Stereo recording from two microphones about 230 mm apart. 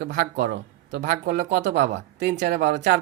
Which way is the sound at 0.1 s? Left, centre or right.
Right.